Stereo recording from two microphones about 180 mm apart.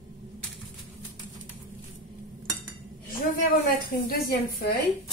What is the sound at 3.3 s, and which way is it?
A woman's voice, 50° left (ahead or behind).